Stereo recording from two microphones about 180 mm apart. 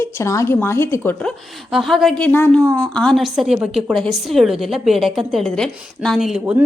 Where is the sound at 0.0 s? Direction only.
15° left (ahead or behind).